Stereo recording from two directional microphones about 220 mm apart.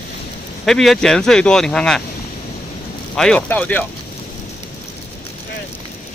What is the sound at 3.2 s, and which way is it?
Speech, 5° left (ahead or behind).